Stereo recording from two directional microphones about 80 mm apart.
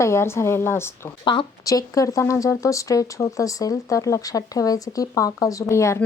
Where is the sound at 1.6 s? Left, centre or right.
Left.